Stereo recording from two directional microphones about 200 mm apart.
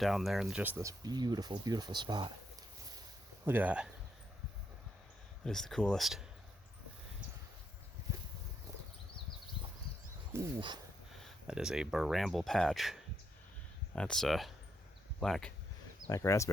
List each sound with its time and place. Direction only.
0.0 s speech: centre (ahead or behind); by 2.3 s 20° right (ahead or behind)
3.4 s speech: 10° right (ahead or behind)
5.5 s speech: centre (ahead or behind)
10.3 s speech: 15° right (ahead or behind)
11.1 s speech: centre (ahead or behind)
16.0 s speech: 15° left (ahead or behind)